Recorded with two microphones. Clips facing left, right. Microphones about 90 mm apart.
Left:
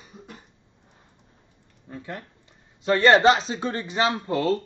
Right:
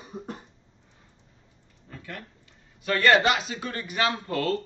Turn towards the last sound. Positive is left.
turn(degrees=20)  # may be behind; listen again after turning